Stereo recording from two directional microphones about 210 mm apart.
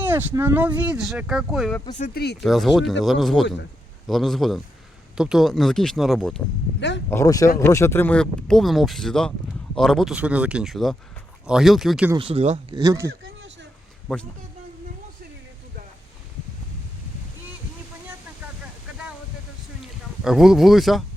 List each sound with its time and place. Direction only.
0.0 s speech: 10° right (ahead or behind)
2.0 s speech: 45° left (ahead or behind)
2.4 s speech: centre (ahead or behind)
6.7 s speech: 55° left (ahead or behind)
7.1 s speech: 15° left (ahead or behind); by 12.1 s 5° right (ahead or behind)
12.1 s speech: 25° right (ahead or behind)
12.8 s speech: 15° right (ahead or behind)
13.2 s a sound: 60° right (ahead or behind)
20.2 s speech: centre (ahead or behind)